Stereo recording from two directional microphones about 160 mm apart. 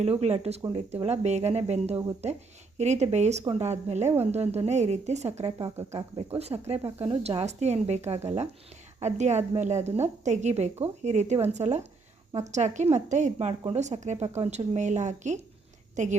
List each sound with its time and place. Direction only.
0.0 s a woman's voice: 40° right (ahead or behind)